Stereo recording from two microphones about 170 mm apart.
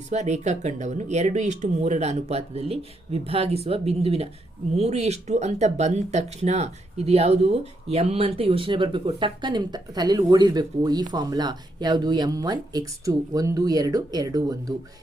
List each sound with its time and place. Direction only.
0.1 s speech: 40° right (ahead or behind); by 14.6 s 20° right (ahead or behind)